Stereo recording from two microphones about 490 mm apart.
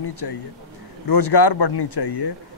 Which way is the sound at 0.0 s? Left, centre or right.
Left.